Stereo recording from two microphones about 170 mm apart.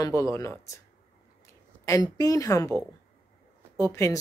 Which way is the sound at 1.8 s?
20° left (ahead or behind).